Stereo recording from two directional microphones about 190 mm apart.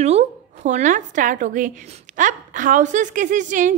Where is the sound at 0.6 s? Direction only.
40° right (ahead or behind).